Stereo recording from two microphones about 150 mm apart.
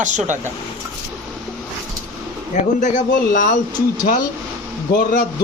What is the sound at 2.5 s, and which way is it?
A man's voice, 55° left (ahead or behind).